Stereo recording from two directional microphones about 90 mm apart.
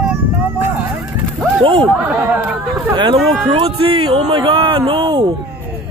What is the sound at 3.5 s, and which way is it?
Speech, 90° right.